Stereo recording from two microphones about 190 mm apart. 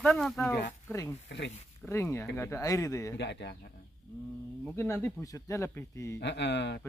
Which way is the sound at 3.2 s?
65° left (ahead or behind).